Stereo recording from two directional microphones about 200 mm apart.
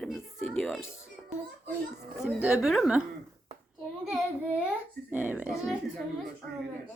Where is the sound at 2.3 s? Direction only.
5° right (ahead or behind).